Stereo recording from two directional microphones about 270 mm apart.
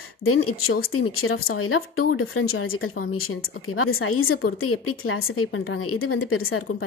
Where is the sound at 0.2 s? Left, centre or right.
Left.